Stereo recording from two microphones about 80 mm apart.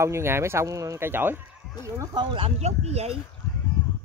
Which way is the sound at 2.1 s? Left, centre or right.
Right.